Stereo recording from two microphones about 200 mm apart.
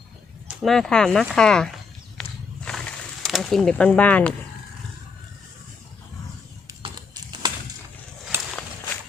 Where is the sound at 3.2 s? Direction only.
Centre (ahead or behind).